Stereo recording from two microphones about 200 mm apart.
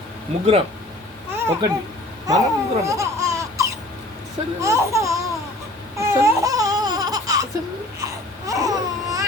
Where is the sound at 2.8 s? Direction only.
15° right (ahead or behind).